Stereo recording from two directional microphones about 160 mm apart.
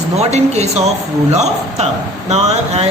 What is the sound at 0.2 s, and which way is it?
A man's voice, 45° right (ahead or behind).